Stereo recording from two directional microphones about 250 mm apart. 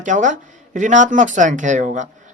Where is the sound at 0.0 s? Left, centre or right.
Right.